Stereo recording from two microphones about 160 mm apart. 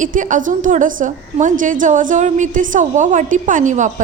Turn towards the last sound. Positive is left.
turn(degrees=-50)  # may be behind; listen again after turning